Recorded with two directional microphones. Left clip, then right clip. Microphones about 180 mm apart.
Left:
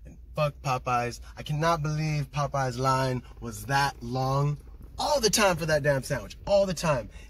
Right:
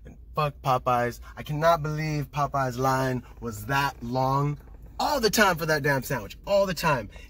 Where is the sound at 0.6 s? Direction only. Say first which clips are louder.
Right 6 dB; 35° right (ahead or behind).